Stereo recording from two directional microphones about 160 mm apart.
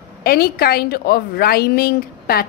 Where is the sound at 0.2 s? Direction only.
75° left (ahead or behind).